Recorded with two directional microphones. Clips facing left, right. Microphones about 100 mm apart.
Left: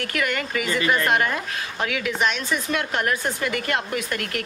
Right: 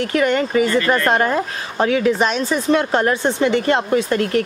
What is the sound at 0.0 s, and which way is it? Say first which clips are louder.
Speech: right 9 dB; 30° right (ahead or behind).